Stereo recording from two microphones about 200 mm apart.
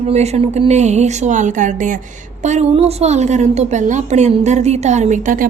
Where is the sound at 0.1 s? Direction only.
35° right (ahead or behind).